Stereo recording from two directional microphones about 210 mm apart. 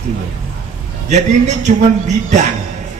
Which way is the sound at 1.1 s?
35° right (ahead or behind).